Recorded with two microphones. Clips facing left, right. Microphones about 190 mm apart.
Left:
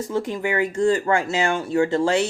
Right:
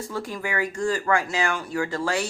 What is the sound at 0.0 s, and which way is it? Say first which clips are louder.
Speech: left 6 dB; 20° left (ahead or behind).